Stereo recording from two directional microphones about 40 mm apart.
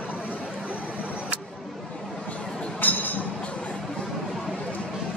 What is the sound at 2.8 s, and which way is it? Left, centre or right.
Chink, left.